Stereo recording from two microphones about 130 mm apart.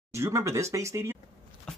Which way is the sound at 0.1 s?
20° right (ahead or behind).